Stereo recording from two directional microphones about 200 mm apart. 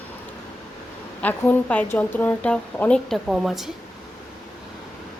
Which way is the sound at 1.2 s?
10° left (ahead or behind).